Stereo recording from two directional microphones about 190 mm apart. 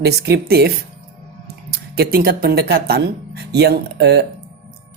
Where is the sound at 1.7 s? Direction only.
50° right (ahead or behind).